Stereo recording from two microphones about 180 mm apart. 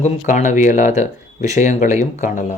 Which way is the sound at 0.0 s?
40° left (ahead or behind).